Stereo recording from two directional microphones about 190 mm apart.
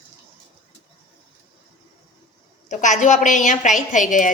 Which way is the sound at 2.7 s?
40° left (ahead or behind).